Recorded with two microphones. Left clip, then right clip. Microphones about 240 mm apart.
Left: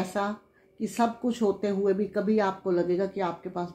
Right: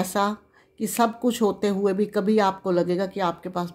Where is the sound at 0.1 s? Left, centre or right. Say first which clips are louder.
Right 6 dB; right.